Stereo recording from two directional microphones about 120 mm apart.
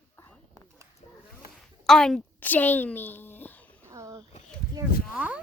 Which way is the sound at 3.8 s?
25° right (ahead or behind).